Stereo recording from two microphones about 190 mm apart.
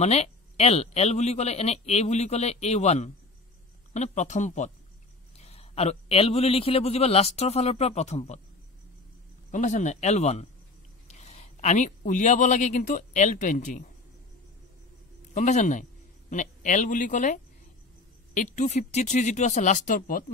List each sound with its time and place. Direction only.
0.0 s speech: 35° left (ahead or behind)
9.5 s speech: 40° left (ahead or behind)
15.3 s speech: 40° left (ahead or behind)